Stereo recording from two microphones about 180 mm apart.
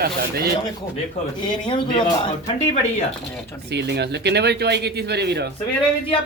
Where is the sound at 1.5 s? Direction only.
25° left (ahead or behind).